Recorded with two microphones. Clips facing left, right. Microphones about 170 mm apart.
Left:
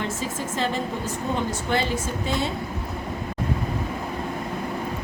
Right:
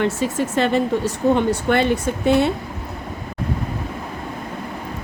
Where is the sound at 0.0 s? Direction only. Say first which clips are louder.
Right 8 dB; 65° right (ahead or behind).